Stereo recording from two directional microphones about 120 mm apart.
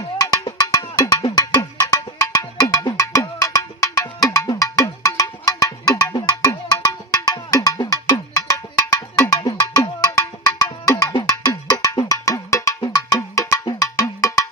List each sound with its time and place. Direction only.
0.2 s music: 30° left (ahead or behind)
9.3 s cowbell: 30° left (ahead or behind)